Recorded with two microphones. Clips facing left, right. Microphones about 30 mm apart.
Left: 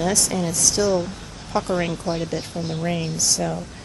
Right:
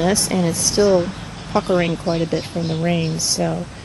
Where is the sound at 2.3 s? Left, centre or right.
Right.